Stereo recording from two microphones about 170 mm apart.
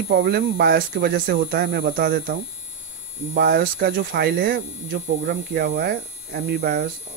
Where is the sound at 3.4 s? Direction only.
65° right (ahead or behind).